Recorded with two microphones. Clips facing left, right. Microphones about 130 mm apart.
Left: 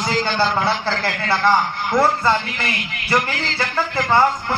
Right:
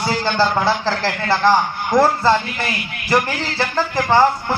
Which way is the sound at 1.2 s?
40° right (ahead or behind).